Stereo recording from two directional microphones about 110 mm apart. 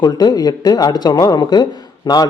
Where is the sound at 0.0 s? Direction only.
35° left (ahead or behind).